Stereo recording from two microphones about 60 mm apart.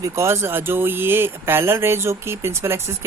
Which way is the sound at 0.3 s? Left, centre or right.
Right.